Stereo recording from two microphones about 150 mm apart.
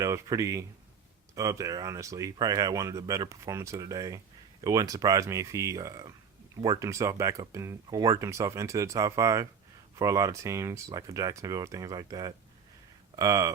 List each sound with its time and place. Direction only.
0.0 s speech: 20° right (ahead or behind)